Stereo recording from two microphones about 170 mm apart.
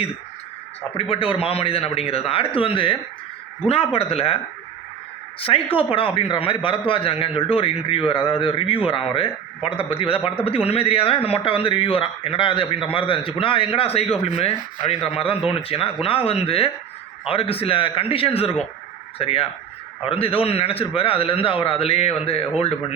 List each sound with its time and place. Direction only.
0.9 s a man's voice: 35° left (ahead or behind)
5.4 s a man's voice: 30° left (ahead or behind)